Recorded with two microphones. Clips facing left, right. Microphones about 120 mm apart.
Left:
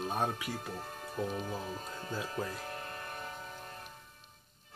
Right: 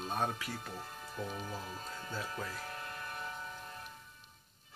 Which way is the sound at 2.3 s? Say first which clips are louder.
Left 4 dB; 45° left (ahead or behind).